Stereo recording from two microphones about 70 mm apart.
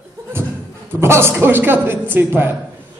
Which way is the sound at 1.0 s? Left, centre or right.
Right.